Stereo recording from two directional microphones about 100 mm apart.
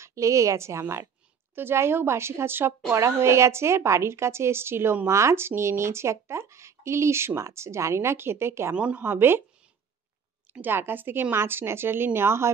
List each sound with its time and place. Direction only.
0.0 s a woman's voice: 30° right (ahead or behind)
8.7 s a woman's voice: 15° right (ahead or behind)
10.5 s a woman's voice: 20° right (ahead or behind)